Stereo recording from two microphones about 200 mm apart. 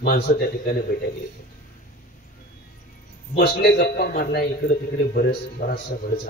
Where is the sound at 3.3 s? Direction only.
50° left (ahead or behind).